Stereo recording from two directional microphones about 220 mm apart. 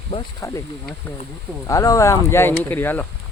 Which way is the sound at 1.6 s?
15° left (ahead or behind).